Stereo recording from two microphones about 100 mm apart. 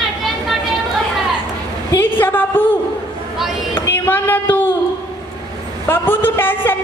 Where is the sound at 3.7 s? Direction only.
20° left (ahead or behind).